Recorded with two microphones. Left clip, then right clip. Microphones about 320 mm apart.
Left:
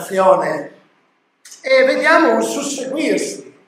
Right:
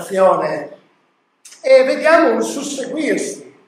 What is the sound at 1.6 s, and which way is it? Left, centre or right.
A man's voice, centre.